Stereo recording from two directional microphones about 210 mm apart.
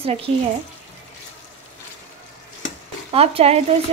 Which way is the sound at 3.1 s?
30° right (ahead or behind).